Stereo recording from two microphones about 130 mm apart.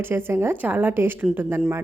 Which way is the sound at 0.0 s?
15° right (ahead or behind).